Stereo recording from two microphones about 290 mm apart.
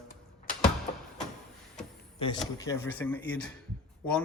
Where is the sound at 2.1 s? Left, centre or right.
Centre.